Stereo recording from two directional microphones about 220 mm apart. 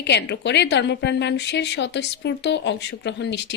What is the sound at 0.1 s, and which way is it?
A woman's voice, 50° left (ahead or behind).